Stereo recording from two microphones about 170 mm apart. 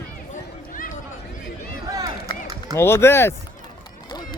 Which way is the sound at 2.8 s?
15° left (ahead or behind).